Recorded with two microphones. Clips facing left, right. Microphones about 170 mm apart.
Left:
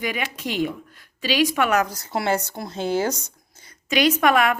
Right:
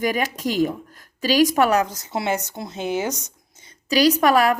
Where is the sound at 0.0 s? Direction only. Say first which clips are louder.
Right 5 dB; 40° right (ahead or behind).